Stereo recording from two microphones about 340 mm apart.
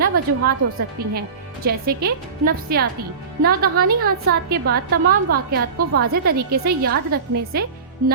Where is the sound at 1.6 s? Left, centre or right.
Right.